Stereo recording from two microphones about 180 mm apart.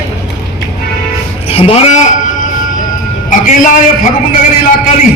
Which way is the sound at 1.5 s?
35° left (ahead or behind).